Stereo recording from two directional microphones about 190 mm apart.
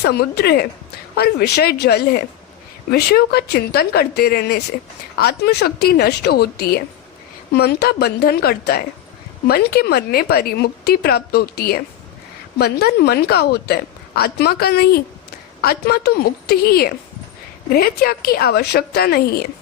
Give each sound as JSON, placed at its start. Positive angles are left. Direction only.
{"t": 0.0, "sound": "a woman's voice", "side_deg": 60}